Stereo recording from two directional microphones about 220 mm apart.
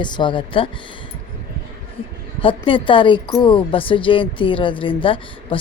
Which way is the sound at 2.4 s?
25° left (ahead or behind).